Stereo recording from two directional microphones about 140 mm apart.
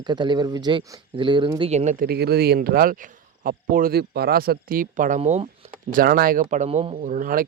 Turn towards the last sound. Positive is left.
turn(degrees=-80)